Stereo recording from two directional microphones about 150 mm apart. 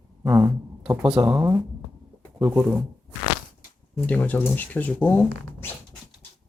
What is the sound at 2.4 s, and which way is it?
Speech, 10° right (ahead or behind).